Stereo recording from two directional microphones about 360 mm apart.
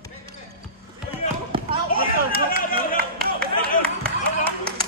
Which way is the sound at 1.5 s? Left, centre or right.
Centre.